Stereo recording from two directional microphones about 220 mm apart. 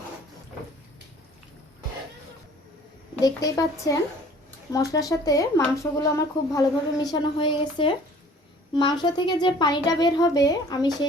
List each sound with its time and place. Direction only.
3.2 s speech: 15° left (ahead or behind)